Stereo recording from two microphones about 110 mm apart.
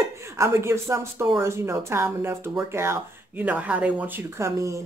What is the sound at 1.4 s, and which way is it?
Speech, 25° right (ahead or behind).